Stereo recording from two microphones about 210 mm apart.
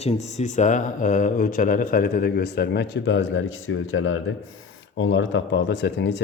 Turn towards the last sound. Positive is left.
turn(degrees=55)  # may be behind; listen again after turning